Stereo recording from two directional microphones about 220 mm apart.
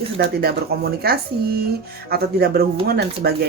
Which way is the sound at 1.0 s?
45° right (ahead or behind).